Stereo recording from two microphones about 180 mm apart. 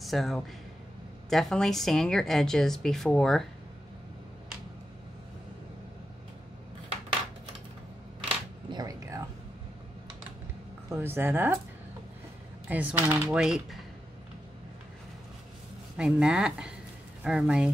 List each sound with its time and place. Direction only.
0.0 s a woman's voice: centre (ahead or behind)
8.6 s a sound: 20° right (ahead or behind)
10.9 s speech: 15° right (ahead or behind)
12.6 s speech: 10° right (ahead or behind)
16.0 s a woman's voice: 5° right (ahead or behind)